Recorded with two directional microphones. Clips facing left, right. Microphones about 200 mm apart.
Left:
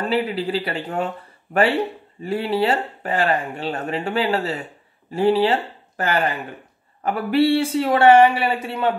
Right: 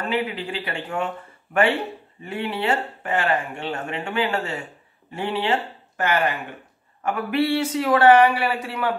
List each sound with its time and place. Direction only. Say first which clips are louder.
0.1 s speech: left 4 dB; 35° left (ahead or behind)